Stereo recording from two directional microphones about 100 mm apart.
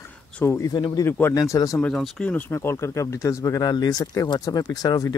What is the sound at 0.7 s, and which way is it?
Speech, 40° left (ahead or behind).